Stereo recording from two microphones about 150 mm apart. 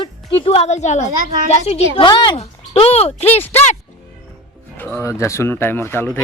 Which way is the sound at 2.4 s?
40° left (ahead or behind).